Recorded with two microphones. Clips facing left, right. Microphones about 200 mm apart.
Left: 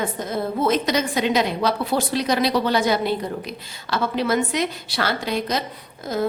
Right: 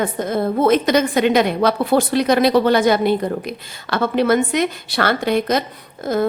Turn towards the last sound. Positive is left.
turn(degrees=-55)  # may be behind; listen again after turning